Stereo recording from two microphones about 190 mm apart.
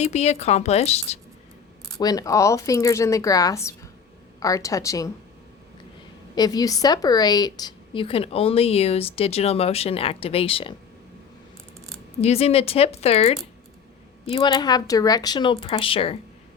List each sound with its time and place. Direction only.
0.0 s speech: 35° left (ahead or behind)
2.0 s speech: 20° left (ahead or behind)
6.3 s a woman's voice: 20° left (ahead or behind)
12.2 s speech: 35° left (ahead or behind)
14.3 s a woman's voice: 20° left (ahead or behind)